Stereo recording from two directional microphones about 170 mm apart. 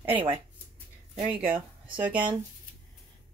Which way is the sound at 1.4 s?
10° right (ahead or behind).